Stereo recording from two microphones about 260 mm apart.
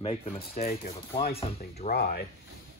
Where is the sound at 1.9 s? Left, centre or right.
Left.